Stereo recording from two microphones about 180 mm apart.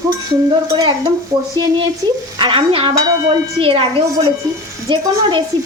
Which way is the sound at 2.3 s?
30° right (ahead or behind).